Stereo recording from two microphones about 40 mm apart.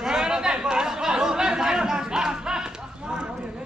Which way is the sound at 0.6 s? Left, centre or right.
Centre.